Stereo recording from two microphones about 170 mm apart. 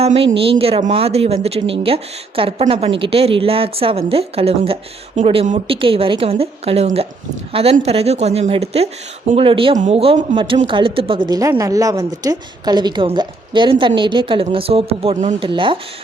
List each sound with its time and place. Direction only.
0.0 s a woman's voice: 35° right (ahead or behind)
9.7 s a woman's voice: 40° right (ahead or behind)
15.4 s a woman's voice: 30° right (ahead or behind)